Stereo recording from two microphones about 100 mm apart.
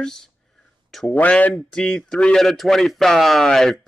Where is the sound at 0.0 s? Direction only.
5° left (ahead or behind).